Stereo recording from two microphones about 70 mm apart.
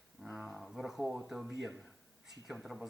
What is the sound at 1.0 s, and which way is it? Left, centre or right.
Speech, centre.